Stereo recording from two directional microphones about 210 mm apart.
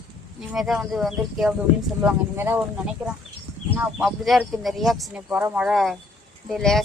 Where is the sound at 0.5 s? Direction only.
Centre (ahead or behind).